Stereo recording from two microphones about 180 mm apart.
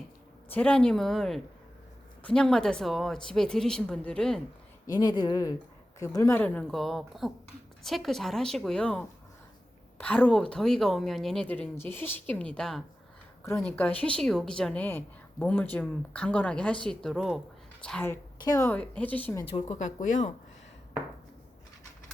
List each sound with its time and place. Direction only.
0.5 s speech: 5° left (ahead or behind)
4.9 s speech: 20° left (ahead or behind)
19.5 s speech: 35° left (ahead or behind)